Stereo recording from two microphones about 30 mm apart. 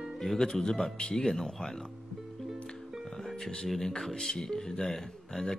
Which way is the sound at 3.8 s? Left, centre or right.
Centre.